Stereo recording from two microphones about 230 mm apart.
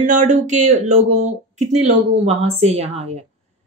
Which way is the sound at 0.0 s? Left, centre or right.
Right.